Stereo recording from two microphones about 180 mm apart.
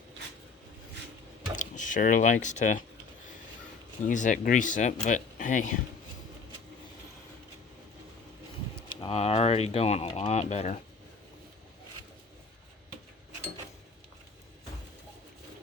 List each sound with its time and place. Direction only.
1.5 s speech: 45° left (ahead or behind)
4.0 s speech: 45° left (ahead or behind)
8.9 s speech: 30° left (ahead or behind)